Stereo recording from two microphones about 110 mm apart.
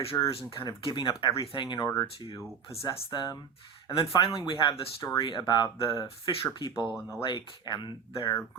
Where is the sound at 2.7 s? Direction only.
30° left (ahead or behind).